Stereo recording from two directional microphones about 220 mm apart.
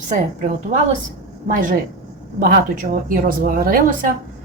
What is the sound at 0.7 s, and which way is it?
Speech, 35° right (ahead or behind).